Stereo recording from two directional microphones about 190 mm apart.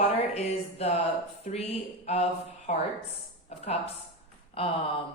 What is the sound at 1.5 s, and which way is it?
Speech, 35° left (ahead or behind).